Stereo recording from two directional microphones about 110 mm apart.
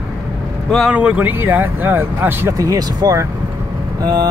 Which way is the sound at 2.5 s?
35° right (ahead or behind).